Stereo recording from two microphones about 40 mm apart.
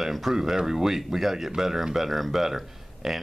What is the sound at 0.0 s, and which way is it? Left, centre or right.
Speech, centre.